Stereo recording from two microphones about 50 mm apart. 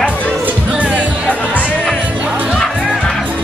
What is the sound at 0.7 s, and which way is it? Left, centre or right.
Music, right.